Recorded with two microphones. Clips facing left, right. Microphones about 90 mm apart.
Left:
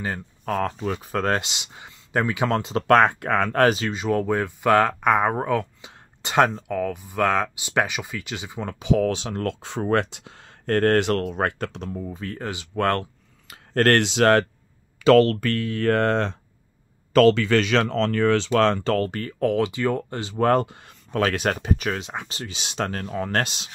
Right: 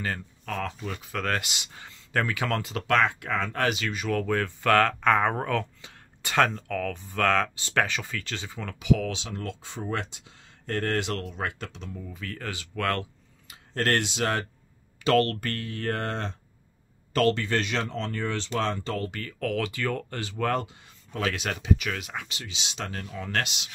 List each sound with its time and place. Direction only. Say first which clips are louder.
0.5 s speech: left 8 dB; 40° left (ahead or behind); by 2.8 s 25° left (ahead or behind)
2.9 s speech: left 7 dB; 45° left (ahead or behind)
3.6 s speech: left 7 dB; 35° left (ahead or behind)
3.9 s speech: left 4 dB; 25° left (ahead or behind)
9.1 s speech: left 8 dB; 55° left (ahead or behind)
12.1 s speech: left 5 dB; 30° left (ahead or behind)
12.7 s speech: left 6 dB; 35° left (ahead or behind)
13.0 s a sound: left 2 dB; 60° left (ahead or behind); by 14.4 s 75° left (ahead or behind)
15.7 s speech: left 11 dB; 90° left
17.4 s speech: left 8 dB; 90° left; by 19.0 s 75° left (ahead or behind)
19.0 s speech: left 8 dB; 35° left (ahead or behind)
19.5 s speech: left 4 dB; 20° left (ahead or behind)
20.3 s speech: left 8 dB; 45° left (ahead or behind)